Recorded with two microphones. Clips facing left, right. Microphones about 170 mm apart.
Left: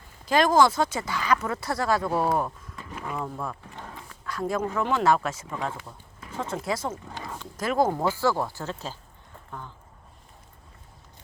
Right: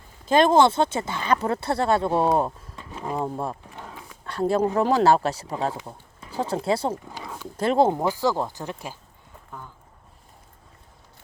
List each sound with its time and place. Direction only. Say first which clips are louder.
0.3 s speech: right 3 dB; 25° right (ahead or behind)
3.8 s dog: right 1 dB; 5° right (ahead or behind)
4.3 s speech: right 6 dB; 30° right (ahead or behind)
7.1 s a sound: even; 5° right (ahead or behind)
7.5 s speech: right 4 dB; 30° right (ahead or behind)
7.9 s speech: right 1 dB; 15° right (ahead or behind)